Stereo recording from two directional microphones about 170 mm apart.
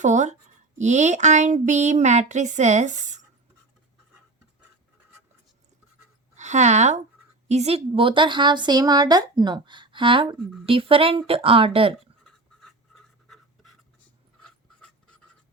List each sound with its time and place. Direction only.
0.0 s speech: 45° right (ahead or behind)
6.3 s a woman's voice: 45° right (ahead or behind)
12.2 s writing: centre (ahead or behind)
14.8 s pant: 5° left (ahead or behind)